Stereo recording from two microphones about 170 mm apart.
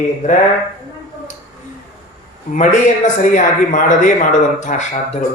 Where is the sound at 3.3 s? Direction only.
50° left (ahead or behind).